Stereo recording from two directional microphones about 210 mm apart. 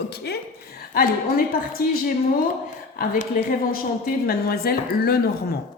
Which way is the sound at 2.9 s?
40° left (ahead or behind).